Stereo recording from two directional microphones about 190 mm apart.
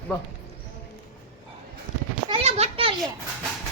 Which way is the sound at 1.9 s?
40° left (ahead or behind).